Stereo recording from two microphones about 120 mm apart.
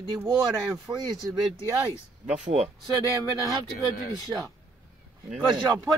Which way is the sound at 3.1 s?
25° right (ahead or behind).